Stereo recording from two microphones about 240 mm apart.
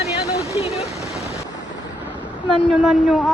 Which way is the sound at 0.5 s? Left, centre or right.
Left.